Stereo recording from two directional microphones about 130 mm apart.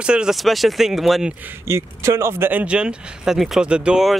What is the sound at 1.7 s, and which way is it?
Speech, 20° right (ahead or behind).